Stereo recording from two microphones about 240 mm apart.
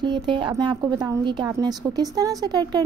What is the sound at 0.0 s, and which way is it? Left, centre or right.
A woman's voice, centre.